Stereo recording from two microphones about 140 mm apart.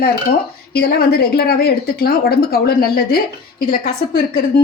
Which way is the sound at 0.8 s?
90° left.